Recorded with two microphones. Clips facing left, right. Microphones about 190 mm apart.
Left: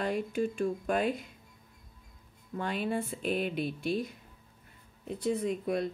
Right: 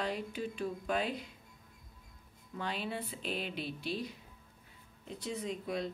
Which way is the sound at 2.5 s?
50° left (ahead or behind).